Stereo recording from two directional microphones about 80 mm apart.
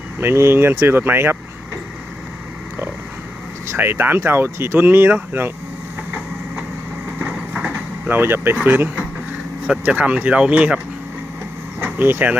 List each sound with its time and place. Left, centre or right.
0.2 s speech: right
3.7 s speech: right
7.3 s vehicle: centre
7.7 s speech: right
11.8 s speech: right